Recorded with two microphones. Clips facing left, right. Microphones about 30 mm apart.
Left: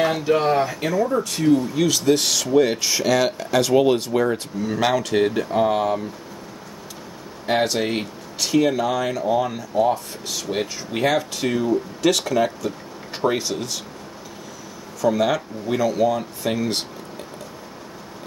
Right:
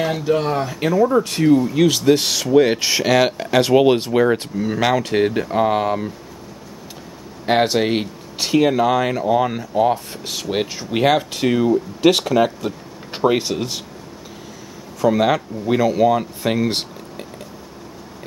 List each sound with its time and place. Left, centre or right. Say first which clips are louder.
0.0 s speech: even; centre
0.7 s speech: right 4 dB; right
1.0 s speech: right 6 dB; right
1.8 s speech: right 4 dB; centre
4.6 s speech: right 2 dB; centre
7.4 s speech: right 4 dB; right
15.0 s speech: right 3 dB; right